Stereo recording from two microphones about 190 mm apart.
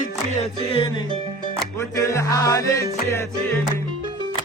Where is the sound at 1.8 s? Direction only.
15° left (ahead or behind).